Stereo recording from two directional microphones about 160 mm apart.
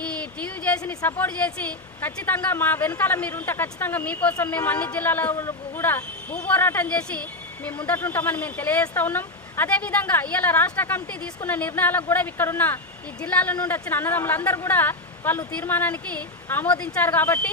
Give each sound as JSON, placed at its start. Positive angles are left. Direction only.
{"t": 0.0, "sound": "speech", "side_deg": 10}